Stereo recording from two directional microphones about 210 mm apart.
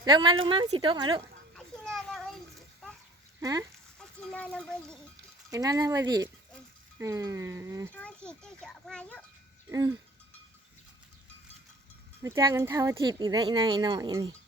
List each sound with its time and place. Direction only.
0.0 s speech: 20° right (ahead or behind)
1.5 s children playing: centre (ahead or behind)
3.4 s speech: 15° right (ahead or behind)
3.9 s speech: 5° left (ahead or behind)
5.5 s speech: 15° right (ahead or behind)
7.9 s a child's voice: 5° left (ahead or behind)
9.6 s speech: 20° right (ahead or behind)
12.2 s speech: 15° right (ahead or behind)